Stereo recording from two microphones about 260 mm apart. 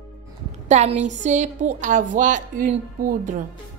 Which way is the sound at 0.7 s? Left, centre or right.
Right.